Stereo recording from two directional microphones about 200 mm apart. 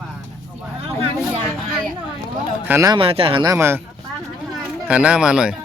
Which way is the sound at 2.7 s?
15° right (ahead or behind).